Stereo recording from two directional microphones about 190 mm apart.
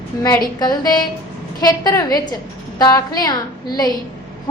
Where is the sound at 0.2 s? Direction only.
20° left (ahead or behind).